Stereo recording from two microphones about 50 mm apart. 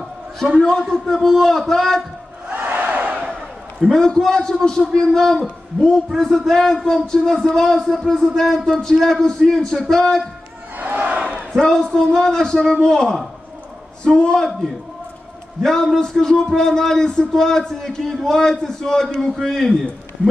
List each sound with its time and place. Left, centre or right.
0.6 s a man's voice: centre
2.5 s battle cry: right
3.9 s a man's voice: centre
10.8 s battle cry: right
11.8 s a man's voice: centre